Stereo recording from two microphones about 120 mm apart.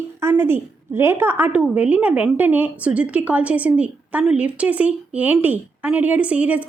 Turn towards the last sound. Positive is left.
turn(degrees=-10)  # may be behind; listen again after turning